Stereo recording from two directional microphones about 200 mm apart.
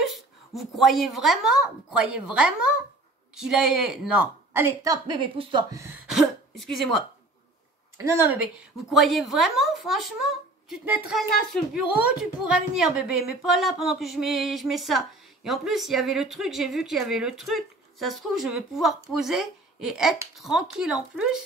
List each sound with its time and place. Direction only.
0.6 s a woman's voice: centre (ahead or behind)
4.8 s a woman's voice: 20° right (ahead or behind)
6.0 s throat clearing: centre (ahead or behind)
8.0 s a woman's voice: 10° right (ahead or behind)